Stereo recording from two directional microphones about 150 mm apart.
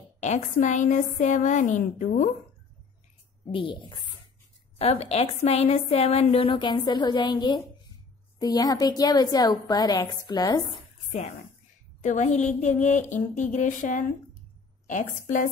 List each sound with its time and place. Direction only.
0.2 s a woman's voice: 55° left (ahead or behind)
3.5 s a woman's voice: 35° left (ahead or behind)
4.7 s a woman's voice: 45° left (ahead or behind); by 10.8 s 25° left (ahead or behind)
12.0 s a woman's voice: 55° left (ahead or behind)